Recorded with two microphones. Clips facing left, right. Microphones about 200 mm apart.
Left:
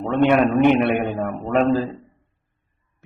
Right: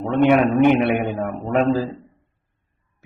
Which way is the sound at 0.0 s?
5° right (ahead or behind).